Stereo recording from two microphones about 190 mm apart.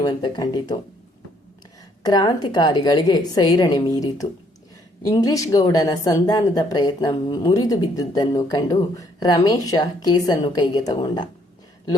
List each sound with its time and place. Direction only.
0.0 s a woman's voice: 20° left (ahead or behind)
2.0 s a woman's voice: 20° left (ahead or behind)